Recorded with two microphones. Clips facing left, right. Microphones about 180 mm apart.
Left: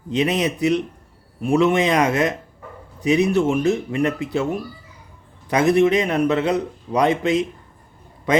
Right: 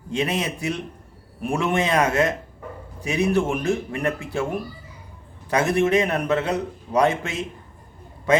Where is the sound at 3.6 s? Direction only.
20° left (ahead or behind).